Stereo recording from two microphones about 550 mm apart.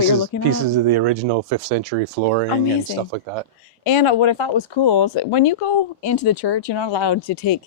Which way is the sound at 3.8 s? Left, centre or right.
Left.